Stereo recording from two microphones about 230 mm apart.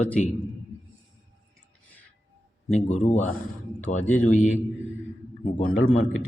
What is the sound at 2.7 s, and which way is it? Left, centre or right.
Speech, left.